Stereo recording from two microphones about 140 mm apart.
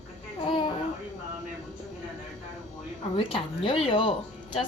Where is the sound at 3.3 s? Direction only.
40° left (ahead or behind).